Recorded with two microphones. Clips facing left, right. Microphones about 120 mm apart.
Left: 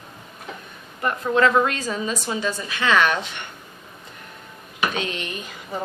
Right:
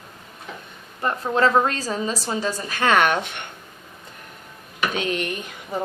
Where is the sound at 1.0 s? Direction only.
30° right (ahead or behind); by 3.4 s 55° right (ahead or behind).